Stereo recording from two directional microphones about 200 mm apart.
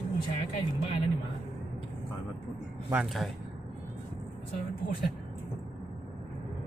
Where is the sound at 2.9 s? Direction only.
Centre (ahead or behind).